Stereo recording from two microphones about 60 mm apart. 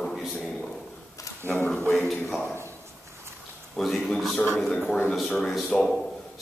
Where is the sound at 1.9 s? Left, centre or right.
Centre.